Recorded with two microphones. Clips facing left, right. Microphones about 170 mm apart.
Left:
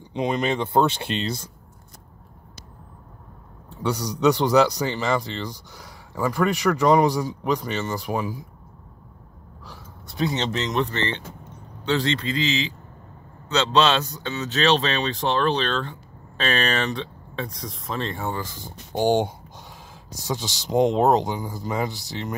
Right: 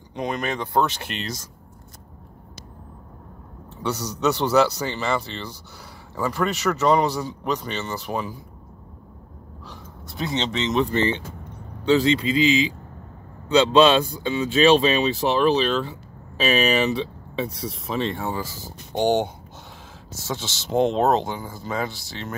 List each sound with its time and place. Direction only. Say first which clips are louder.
0.2 s speech: left 3 dB; 20° left (ahead or behind)
3.7 s speech: left 2 dB; 10° left (ahead or behind)
10.0 s speech: left 2 dB; centre (ahead or behind)
10.9 s speech: right 5 dB; 10° right (ahead or behind)
18.9 s speech: even; 10° left (ahead or behind)